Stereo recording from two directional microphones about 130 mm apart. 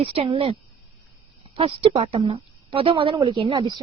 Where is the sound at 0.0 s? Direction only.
40° right (ahead or behind).